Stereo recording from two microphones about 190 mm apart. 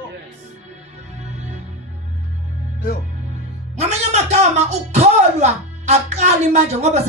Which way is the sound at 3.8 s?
35° right (ahead or behind).